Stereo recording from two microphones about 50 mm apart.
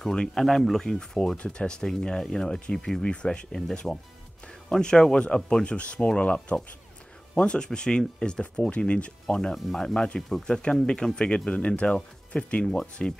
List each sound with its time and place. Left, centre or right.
0.0 s speech: centre
9.4 s speech: centre
9.9 s speech: centre